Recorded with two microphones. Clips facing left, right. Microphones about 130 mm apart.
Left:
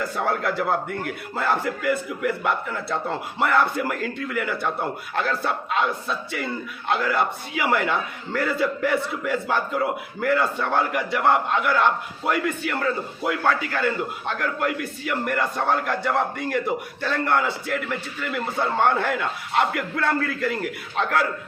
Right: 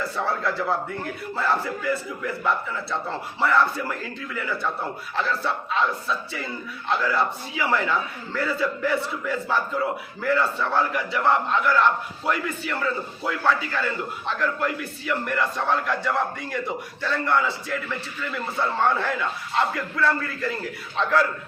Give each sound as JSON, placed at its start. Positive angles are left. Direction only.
{"t": 0.2, "sound": "a man's voice", "side_deg": 60}
{"t": 6.3, "sound": "a man's voice", "side_deg": 60}